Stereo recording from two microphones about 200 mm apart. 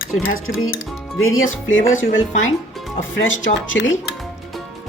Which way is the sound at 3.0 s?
70° left (ahead or behind).